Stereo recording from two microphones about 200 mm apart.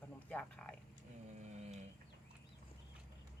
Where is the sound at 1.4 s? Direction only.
35° right (ahead or behind).